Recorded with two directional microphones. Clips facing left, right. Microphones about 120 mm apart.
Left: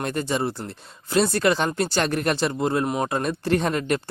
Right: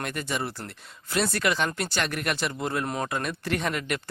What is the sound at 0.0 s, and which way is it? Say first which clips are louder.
Speech: left 6 dB; 30° left (ahead or behind).